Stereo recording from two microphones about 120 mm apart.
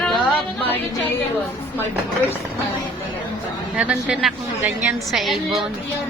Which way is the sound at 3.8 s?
5° right (ahead or behind).